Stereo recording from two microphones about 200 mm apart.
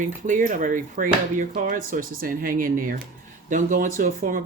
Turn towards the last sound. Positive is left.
turn(degrees=-40)  # may be behind; listen again after turning